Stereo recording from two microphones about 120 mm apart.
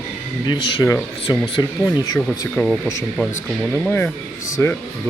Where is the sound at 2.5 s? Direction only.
5° left (ahead or behind).